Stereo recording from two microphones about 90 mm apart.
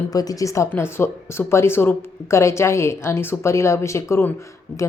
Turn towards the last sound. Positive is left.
turn(degrees=30)  # may be behind; listen again after turning